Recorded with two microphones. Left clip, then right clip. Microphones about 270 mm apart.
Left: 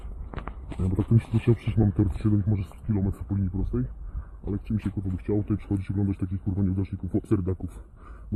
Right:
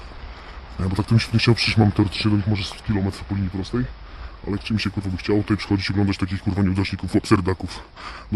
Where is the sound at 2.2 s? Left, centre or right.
Right.